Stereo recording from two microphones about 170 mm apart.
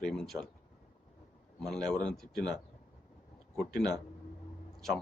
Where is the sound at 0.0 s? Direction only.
5° left (ahead or behind).